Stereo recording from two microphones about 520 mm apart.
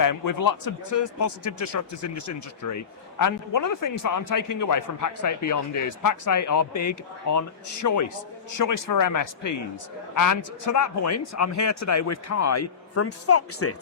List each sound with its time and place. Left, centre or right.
0.0 s speech: left
1.5 s speech: left
2.7 s speech: left
10.7 s speech: left